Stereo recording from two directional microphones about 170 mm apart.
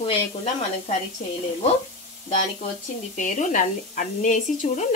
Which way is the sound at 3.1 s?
50° left (ahead or behind).